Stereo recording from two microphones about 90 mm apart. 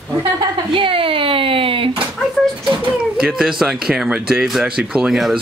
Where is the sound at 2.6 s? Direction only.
55° right (ahead or behind).